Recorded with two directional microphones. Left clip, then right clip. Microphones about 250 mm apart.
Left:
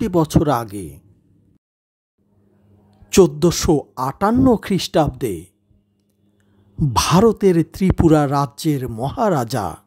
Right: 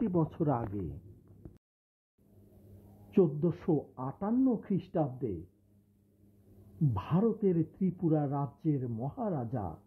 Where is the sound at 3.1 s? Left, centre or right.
Left.